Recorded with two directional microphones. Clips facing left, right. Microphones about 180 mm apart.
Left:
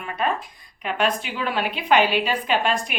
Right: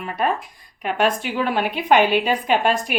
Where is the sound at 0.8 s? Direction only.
50° right (ahead or behind).